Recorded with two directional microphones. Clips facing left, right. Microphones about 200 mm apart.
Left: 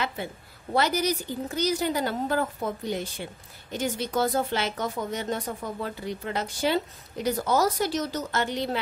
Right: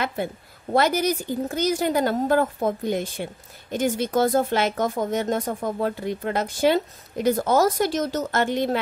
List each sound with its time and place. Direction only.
0.0 s speech: 50° right (ahead or behind)